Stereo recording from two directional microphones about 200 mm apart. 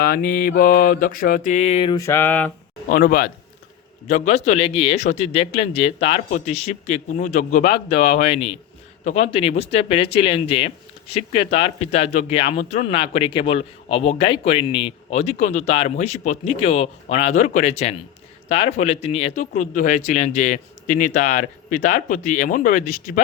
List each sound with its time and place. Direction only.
0.0 s mantra: 45° left (ahead or behind); by 2.5 s 10° left (ahead or behind)
2.9 s mantra: 45° left (ahead or behind)
4.1 s a man's voice: 35° left (ahead or behind)